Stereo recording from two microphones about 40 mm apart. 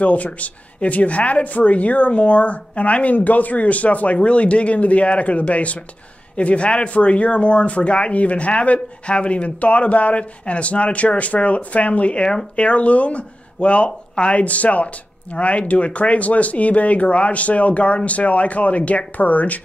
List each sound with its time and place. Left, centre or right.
0.0 s speech: left
14.3 s speech: left